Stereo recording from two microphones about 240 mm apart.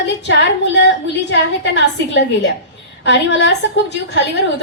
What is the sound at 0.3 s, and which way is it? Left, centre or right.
A woman's voice, left.